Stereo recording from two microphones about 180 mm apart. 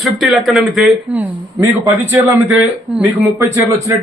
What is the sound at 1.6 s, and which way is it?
A woman's voice, 15° right (ahead or behind).